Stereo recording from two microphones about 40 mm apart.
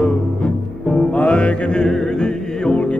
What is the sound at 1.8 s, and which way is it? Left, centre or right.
Music, centre.